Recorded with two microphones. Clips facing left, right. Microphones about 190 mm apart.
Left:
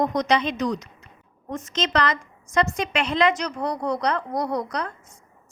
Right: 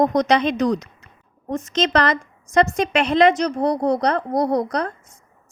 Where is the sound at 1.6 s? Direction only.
45° right (ahead or behind).